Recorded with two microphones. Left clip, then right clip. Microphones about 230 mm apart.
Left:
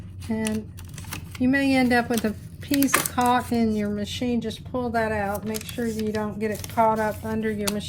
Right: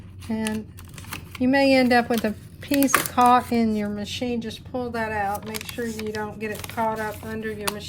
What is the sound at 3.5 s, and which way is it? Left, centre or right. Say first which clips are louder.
A woman's voice: right 1 dB; right.